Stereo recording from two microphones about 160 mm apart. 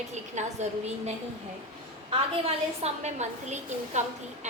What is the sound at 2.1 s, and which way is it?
A woman's voice, 40° right (ahead or behind).